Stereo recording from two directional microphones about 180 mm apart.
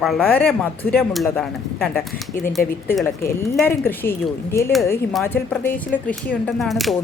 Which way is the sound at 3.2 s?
15° left (ahead or behind).